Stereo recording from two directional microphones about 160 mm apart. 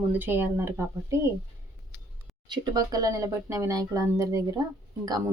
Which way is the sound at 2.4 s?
25° right (ahead or behind).